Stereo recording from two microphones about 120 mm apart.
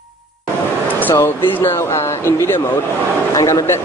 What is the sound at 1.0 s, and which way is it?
Speech, 20° left (ahead or behind).